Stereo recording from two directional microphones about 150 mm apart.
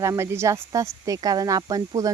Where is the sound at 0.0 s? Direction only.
20° right (ahead or behind).